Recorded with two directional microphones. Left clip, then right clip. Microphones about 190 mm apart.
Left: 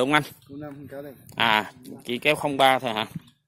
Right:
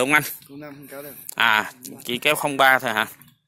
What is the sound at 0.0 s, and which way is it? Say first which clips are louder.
Speech: right 3 dB; 10° left (ahead or behind).